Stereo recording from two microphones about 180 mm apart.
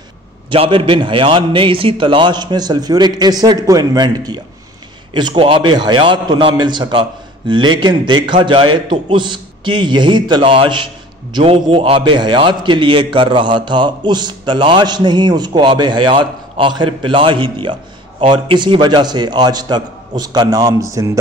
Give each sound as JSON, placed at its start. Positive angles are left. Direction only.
{"t": 0.5, "sound": "a man's voice", "side_deg": -30}